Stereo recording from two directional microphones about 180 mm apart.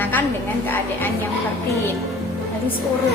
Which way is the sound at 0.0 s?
10° left (ahead or behind).